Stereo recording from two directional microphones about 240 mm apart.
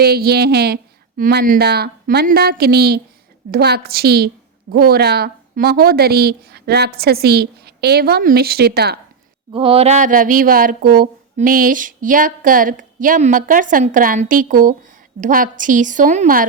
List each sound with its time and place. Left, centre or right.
0.0 s a woman's voice: right
9.5 s a woman's voice: right